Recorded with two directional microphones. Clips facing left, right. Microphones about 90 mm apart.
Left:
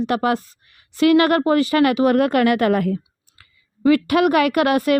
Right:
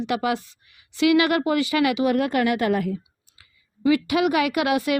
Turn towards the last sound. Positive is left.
turn(degrees=50)  # may be behind; listen again after turning